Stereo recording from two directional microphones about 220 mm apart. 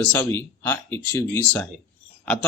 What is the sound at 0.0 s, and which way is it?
Speech, 10° left (ahead or behind).